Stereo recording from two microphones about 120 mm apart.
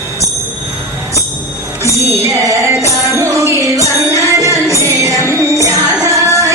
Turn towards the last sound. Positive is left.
turn(degrees=-25)  # may be behind; listen again after turning